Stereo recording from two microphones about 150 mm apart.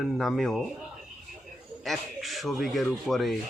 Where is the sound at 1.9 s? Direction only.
Centre (ahead or behind).